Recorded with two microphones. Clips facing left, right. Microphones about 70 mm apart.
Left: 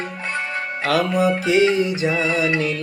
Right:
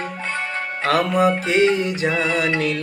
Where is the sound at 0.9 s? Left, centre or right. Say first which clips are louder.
Right 1 dB; right.